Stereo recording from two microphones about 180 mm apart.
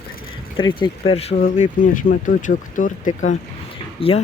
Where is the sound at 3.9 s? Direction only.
30° left (ahead or behind).